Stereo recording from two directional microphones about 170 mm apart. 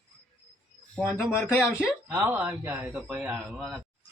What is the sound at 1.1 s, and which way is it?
Speech, 15° left (ahead or behind).